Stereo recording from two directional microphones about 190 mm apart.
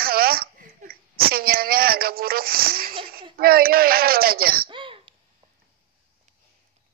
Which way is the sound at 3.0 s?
50° right (ahead or behind).